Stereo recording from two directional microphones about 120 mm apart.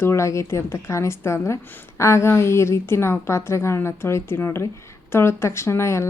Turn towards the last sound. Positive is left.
turn(degrees=20)  # may be behind; listen again after turning